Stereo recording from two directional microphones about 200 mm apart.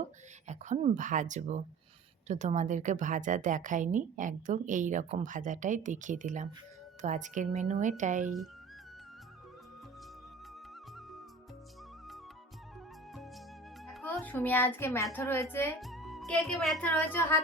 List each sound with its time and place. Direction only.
0.4 s a woman's voice: 35° right (ahead or behind)
13.8 s music: centre (ahead or behind)
14.1 s a woman's voice: 10° left (ahead or behind)
15.8 s speech: centre (ahead or behind)